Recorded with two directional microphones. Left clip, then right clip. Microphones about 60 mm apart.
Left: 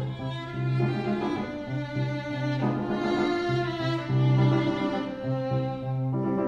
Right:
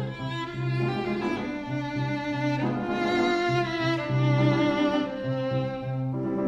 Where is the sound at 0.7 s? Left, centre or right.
Left.